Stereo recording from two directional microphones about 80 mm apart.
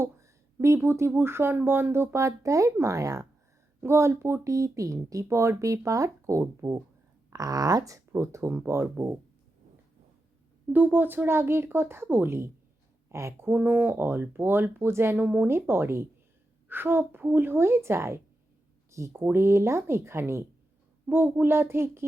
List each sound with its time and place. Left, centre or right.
0.0 s speech: right
3.8 s speech: right
10.7 s speech: right